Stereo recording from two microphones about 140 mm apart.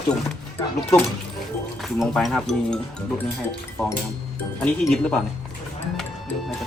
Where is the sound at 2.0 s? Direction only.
Centre (ahead or behind).